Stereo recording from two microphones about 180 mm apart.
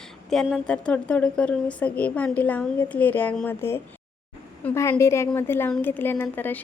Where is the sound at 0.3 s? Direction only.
Centre (ahead or behind).